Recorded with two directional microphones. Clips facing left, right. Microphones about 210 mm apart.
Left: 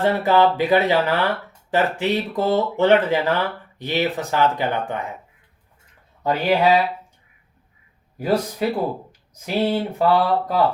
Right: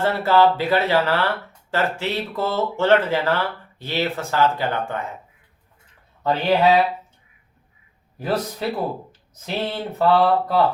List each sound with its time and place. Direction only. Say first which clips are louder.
0.0 s speech: even; 15° left (ahead or behind)
6.2 s speech: even; 10° left (ahead or behind)
8.2 s speech: left 3 dB; 10° left (ahead or behind)